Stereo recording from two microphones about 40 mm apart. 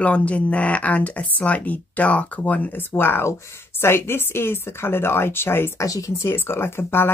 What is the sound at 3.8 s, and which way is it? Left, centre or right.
A woman's voice, left.